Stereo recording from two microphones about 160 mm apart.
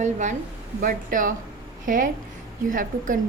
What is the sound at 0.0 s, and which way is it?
A woman's voice, 50° right (ahead or behind).